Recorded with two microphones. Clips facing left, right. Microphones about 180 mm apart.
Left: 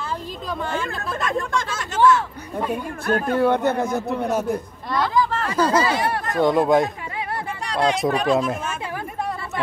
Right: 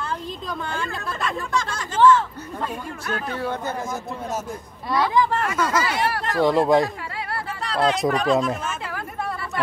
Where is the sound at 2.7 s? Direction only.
55° left (ahead or behind).